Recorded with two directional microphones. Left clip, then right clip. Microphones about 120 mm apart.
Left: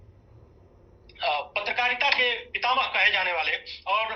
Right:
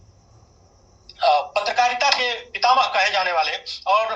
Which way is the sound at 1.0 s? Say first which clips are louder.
Right 9 dB; 15° right (ahead or behind).